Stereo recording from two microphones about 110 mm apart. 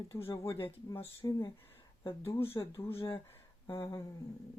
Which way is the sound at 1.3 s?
35° left (ahead or behind).